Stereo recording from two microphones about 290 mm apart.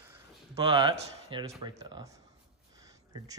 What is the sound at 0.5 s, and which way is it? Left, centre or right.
A man's voice, centre.